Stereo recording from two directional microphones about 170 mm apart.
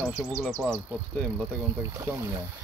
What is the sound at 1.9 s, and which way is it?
Speech, 20° right (ahead or behind).